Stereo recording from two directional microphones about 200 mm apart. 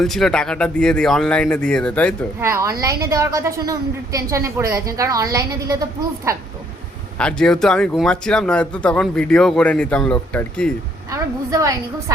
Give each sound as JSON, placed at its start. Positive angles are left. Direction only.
{"t": 0.0, "sound": "speech", "side_deg": 0}
{"t": 2.4, "sound": "a woman's voice", "side_deg": -15}
{"t": 7.2, "sound": "speech", "side_deg": 5}
{"t": 11.1, "sound": "a woman's voice", "side_deg": -15}